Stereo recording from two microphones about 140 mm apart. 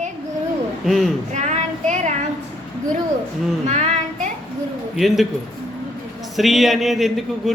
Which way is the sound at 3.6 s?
55° right (ahead or behind).